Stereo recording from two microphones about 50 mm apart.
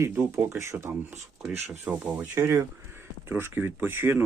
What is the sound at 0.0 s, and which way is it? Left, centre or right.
Speech, right.